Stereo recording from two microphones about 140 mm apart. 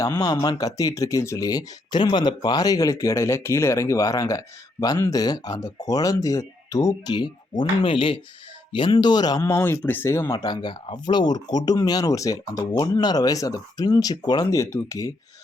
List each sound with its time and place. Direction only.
0.0 s speech: 25° left (ahead or behind)
9.4 s speech: 20° left (ahead or behind)
10.3 s speech: 30° left (ahead or behind)